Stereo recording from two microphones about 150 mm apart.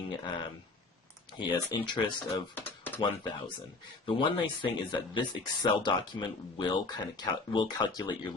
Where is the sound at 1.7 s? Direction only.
30° left (ahead or behind).